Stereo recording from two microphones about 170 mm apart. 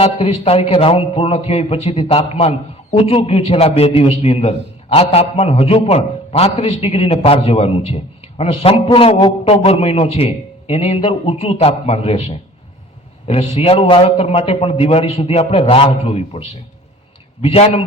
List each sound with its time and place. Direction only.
0.0 s a man's voice: 35° left (ahead or behind)
17.4 s a man's voice: 35° left (ahead or behind)